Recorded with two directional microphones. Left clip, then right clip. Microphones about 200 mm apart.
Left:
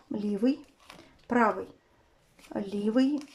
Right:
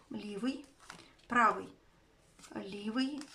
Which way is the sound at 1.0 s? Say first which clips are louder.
Left 3 dB; 30° left (ahead or behind).